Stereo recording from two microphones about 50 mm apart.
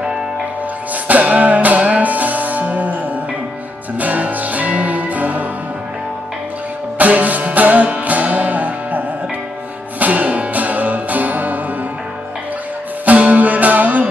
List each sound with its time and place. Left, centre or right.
1.0 s music: right
4.0 s music: right
7.0 s music: right
13.0 s music: right